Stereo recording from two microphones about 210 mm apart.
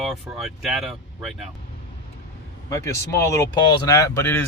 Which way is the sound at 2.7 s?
15° left (ahead or behind).